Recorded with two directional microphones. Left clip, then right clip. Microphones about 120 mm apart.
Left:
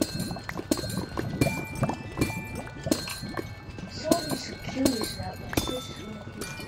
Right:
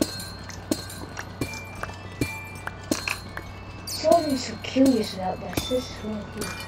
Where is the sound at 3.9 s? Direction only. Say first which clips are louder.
Right 8 dB; 5° right (ahead or behind).